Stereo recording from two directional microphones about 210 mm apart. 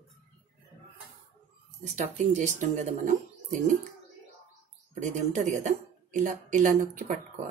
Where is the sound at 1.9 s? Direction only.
35° right (ahead or behind).